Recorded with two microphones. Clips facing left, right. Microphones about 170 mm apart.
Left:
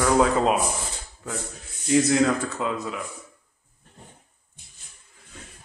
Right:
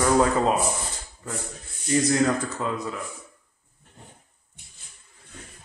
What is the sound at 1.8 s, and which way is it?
Speech, 5° left (ahead or behind).